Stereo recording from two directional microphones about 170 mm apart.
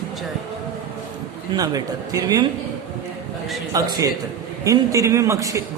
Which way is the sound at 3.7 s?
20° right (ahead or behind).